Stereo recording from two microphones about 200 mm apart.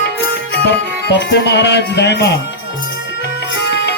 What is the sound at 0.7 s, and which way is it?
Music, 60° left (ahead or behind).